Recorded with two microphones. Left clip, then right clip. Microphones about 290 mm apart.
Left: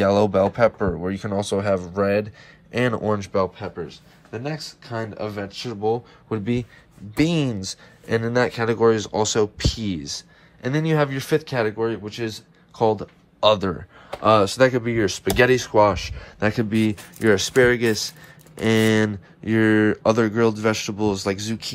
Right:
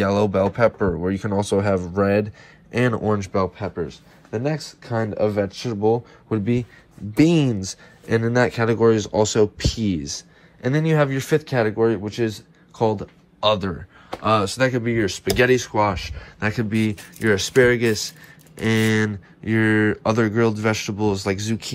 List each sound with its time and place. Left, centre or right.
0.0 s speech: centre
5.7 s speech: centre
6.3 s speech: centre